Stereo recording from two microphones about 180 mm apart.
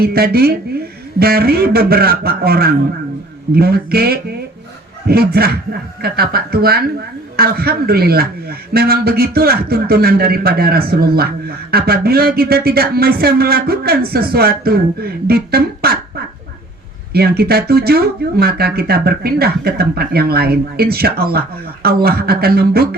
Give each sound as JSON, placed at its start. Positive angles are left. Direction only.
{"t": 0.0, "sound": "a man's voice", "side_deg": -60}
{"t": 17.1, "sound": "a man's voice", "side_deg": -60}